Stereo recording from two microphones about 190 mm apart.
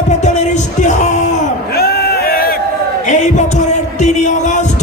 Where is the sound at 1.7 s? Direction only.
55° left (ahead or behind).